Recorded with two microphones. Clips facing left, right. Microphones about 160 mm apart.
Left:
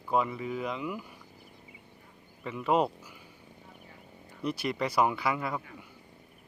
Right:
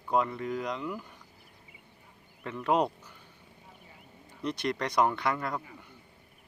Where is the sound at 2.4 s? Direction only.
Centre (ahead or behind).